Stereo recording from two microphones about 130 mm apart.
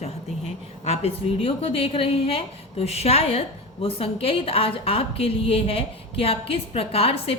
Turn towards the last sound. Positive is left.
turn(degrees=50)  # may be behind; listen again after turning